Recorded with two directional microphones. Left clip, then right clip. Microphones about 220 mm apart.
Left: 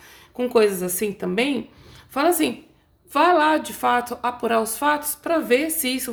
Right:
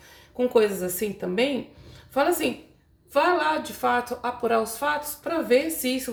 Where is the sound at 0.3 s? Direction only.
50° left (ahead or behind).